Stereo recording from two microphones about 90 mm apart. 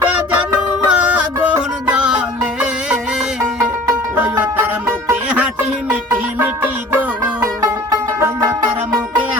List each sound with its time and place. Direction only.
0.0 s music: 15° right (ahead or behind)
4.1 s music: 20° right (ahead or behind)
8.2 s music: 30° right (ahead or behind)